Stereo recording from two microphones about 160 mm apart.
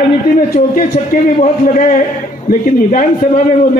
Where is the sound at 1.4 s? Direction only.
55° left (ahead or behind).